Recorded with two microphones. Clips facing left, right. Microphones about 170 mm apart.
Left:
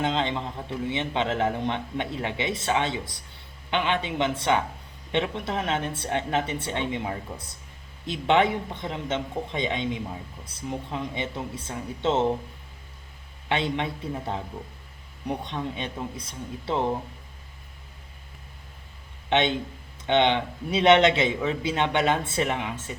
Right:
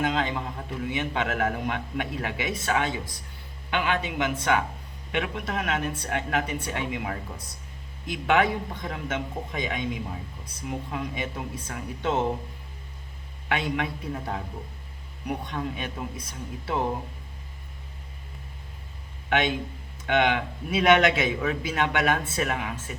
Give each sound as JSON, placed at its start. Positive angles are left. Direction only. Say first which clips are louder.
{"t": 0.0, "sound": "a man's voice", "louder": "even", "side_deg": 25}
{"t": 13.5, "sound": "a man's voice", "louder": "left 1 dB", "side_deg": 25}
{"t": 19.3, "sound": "a man's voice", "louder": "left 2 dB", "side_deg": 25}